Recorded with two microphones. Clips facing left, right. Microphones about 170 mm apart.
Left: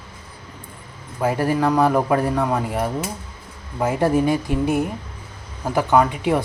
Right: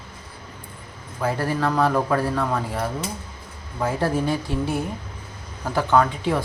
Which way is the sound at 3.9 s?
20° left (ahead or behind).